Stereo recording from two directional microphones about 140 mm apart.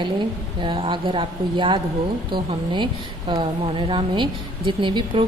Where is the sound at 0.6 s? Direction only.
35° right (ahead or behind).